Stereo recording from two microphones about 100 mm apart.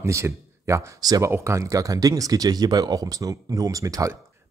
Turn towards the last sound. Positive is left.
turn(degrees=-35)  # may be behind; listen again after turning